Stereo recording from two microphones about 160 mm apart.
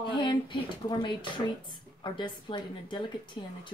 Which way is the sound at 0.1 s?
30° left (ahead or behind).